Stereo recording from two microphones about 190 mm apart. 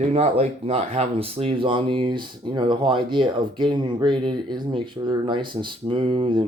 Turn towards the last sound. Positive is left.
turn(degrees=-25)  # may be behind; listen again after turning